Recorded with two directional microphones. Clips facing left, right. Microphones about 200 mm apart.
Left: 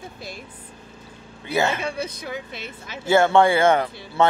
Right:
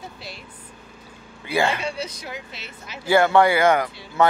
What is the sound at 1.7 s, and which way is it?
Speech, 55° left (ahead or behind).